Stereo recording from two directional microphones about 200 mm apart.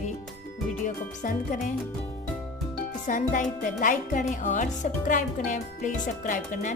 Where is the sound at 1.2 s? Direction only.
40° left (ahead or behind).